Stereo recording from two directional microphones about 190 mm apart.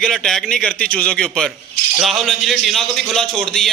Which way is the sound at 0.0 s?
Centre (ahead or behind).